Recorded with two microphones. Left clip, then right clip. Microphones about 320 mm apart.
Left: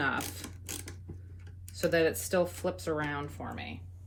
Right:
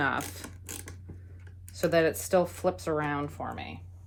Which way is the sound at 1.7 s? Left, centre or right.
Centre.